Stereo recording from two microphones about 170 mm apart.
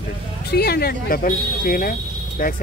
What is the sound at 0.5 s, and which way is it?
Speech, 65° left (ahead or behind).